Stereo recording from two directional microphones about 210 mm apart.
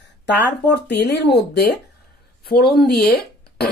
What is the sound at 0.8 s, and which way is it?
A woman's voice, 55° left (ahead or behind).